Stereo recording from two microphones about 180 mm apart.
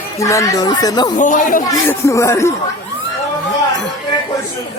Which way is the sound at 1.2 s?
45° left (ahead or behind).